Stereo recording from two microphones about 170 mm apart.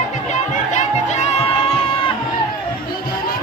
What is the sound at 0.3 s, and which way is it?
Chatter, 40° left (ahead or behind).